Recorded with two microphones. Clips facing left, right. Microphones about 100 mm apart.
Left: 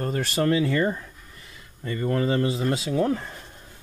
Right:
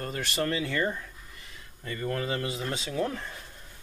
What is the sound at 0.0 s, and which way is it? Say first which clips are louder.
Speech: left 6 dB; 40° left (ahead or behind).